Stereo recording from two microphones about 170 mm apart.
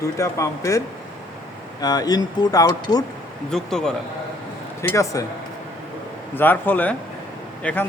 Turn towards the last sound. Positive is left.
turn(degrees=10)  # may be behind; listen again after turning